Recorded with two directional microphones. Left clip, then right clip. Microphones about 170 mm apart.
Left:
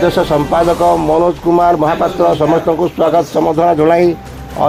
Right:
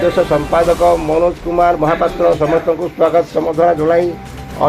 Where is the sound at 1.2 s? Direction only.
60° left (ahead or behind); by 4.0 s 80° left.